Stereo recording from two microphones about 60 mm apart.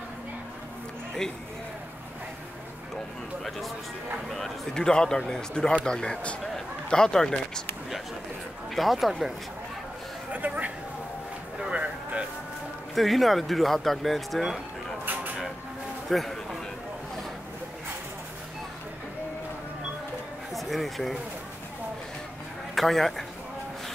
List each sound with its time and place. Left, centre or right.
3.4 s music: centre
4.3 s speech: centre
8.7 s speech: centre
10.3 s speech: right
11.7 s a sound: right
12.9 s speech: centre
16.1 s a sound: centre
20.5 s speech: centre
22.8 s speech: centre